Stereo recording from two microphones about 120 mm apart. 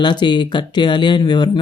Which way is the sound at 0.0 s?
40° left (ahead or behind).